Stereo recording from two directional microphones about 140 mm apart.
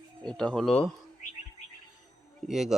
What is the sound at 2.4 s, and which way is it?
Speech, centre (ahead or behind).